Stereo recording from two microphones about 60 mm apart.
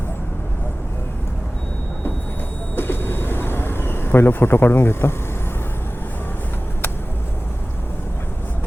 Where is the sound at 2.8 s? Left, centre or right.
Left.